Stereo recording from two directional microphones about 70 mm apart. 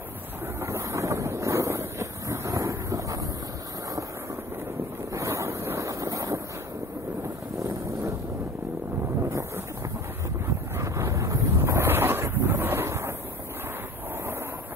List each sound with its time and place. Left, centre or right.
0.6 s wind noise: right
5.1 s boat: right
7.5 s a sound: right
10.8 s wind noise: right